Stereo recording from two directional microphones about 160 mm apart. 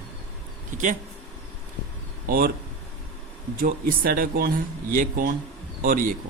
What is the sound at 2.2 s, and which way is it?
Speech, 65° right (ahead or behind).